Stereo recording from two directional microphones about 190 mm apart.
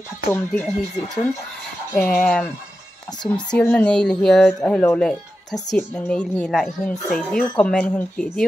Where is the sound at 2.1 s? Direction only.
Centre (ahead or behind).